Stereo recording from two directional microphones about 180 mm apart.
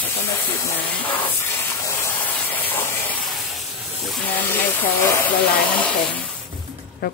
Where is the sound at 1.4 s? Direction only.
15° left (ahead or behind).